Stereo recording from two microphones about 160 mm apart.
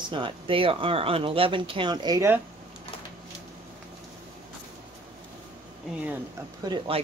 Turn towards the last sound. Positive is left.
turn(degrees=-30)  # may be behind; listen again after turning